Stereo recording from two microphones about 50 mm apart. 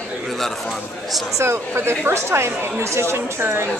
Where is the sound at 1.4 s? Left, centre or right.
Right.